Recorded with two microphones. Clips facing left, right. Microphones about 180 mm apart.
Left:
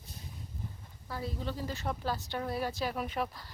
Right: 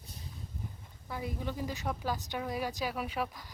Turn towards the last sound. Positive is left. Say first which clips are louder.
# left 1 dB
turn(degrees=-10)  # may be behind; listen again after turning